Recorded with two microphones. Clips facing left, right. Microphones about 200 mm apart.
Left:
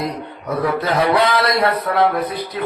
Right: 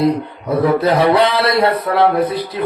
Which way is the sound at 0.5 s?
30° right (ahead or behind).